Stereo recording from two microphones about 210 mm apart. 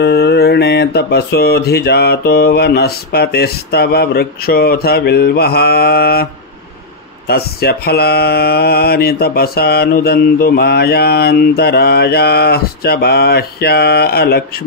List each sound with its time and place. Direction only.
0.0 s mantra: 50° left (ahead or behind)
7.2 s mantra: 50° left (ahead or behind)